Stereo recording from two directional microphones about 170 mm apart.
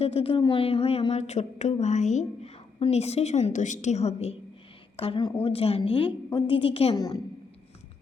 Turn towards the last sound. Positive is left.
turn(degrees=25)  # may be behind; listen again after turning